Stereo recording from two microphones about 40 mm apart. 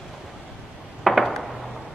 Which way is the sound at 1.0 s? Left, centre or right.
Centre.